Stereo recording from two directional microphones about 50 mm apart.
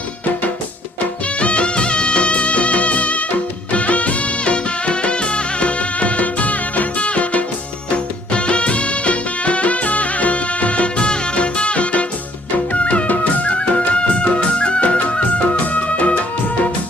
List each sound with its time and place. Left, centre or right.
1.4 s music: left